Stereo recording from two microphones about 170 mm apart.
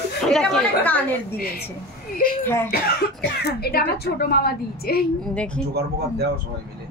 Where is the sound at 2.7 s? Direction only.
70° left (ahead or behind).